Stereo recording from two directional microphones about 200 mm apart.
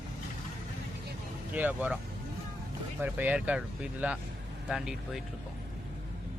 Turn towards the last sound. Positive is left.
turn(degrees=-5)  # may be behind; listen again after turning